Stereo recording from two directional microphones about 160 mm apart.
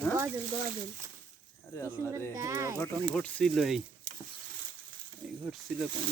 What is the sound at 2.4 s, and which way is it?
Speech, 20° right (ahead or behind).